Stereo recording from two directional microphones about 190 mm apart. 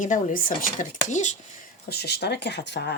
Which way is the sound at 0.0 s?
40° left (ahead or behind).